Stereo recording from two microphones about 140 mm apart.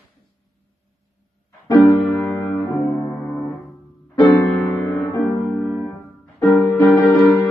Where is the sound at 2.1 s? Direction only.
15° left (ahead or behind).